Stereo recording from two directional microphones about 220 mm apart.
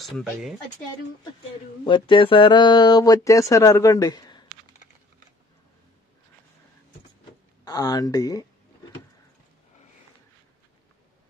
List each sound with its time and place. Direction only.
0.0 s speech: centre (ahead or behind)
1.9 s speech: 20° left (ahead or behind)
7.6 s speech: 15° left (ahead or behind)